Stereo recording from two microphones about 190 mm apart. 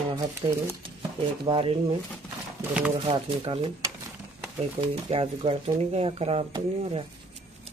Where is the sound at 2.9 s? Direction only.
30° right (ahead or behind).